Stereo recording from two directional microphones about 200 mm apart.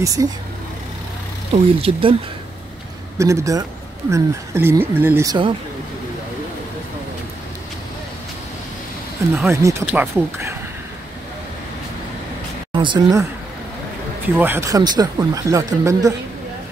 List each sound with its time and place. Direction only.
0.0 s speech: 15° right (ahead or behind)
1.8 s speech: 25° right (ahead or behind)
3.2 s speech: 15° right (ahead or behind)
9.4 s speech: 15° right (ahead or behind)
12.7 s speech: 25° right (ahead or behind)
14.2 s speech: 10° right (ahead or behind)